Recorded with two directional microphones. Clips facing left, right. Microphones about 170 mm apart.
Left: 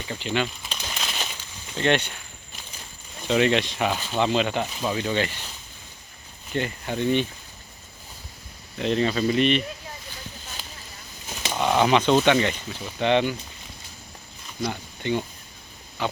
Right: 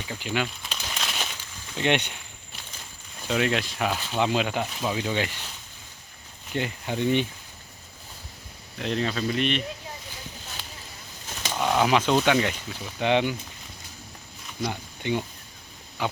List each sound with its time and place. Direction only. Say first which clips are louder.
0.1 s speech: left 2 dB; 10° right (ahead or behind)
0.9 s crumpling: even; centre (ahead or behind)
1.8 s speech: left 2 dB; 15° right (ahead or behind)
3.2 s speech: left 4 dB; centre (ahead or behind)
4.2 s speech: left 2 dB; 10° right (ahead or behind)
6.5 s speech: left 2 dB; 15° right (ahead or behind)
8.8 s speech: left 4 dB; centre (ahead or behind)
11.3 s speech: left 2 dB; 10° left (ahead or behind); by 13.3 s 10° right (ahead or behind)
14.6 s speech: left 1 dB; 15° right (ahead or behind)
16.0 s pig: left 1 dB; 15° right (ahead or behind)